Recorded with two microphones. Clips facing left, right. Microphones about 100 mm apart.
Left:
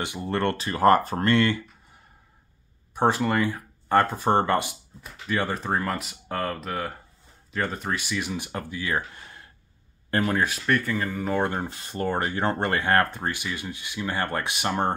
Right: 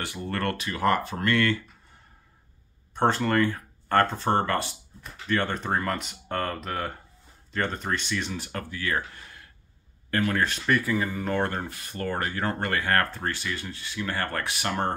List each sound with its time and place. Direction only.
0.0 s speech: 20° left (ahead or behind); by 1.3 s 40° left (ahead or behind)
1.3 s speech: 20° left (ahead or behind)
2.9 s speech: 10° left (ahead or behind)
5.0 s speech: 5° left (ahead or behind); by 9.5 s 25° left (ahead or behind)
10.3 s speech: 10° left (ahead or behind)
10.7 s speech: 5° right (ahead or behind)
11.3 s speech: 15° left (ahead or behind)